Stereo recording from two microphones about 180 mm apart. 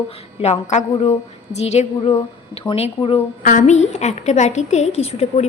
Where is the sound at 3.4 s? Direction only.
45° left (ahead or behind).